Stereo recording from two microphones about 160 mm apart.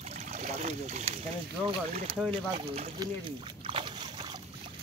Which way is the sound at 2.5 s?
35° right (ahead or behind).